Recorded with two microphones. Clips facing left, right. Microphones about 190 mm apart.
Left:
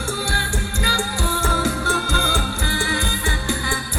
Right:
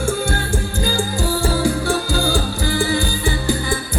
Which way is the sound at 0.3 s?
40° right (ahead or behind).